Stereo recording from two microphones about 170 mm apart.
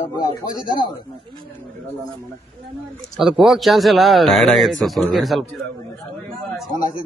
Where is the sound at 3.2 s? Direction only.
5° right (ahead or behind).